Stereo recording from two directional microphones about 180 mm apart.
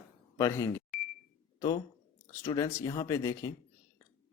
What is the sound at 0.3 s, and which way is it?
Speech, 15° left (ahead or behind).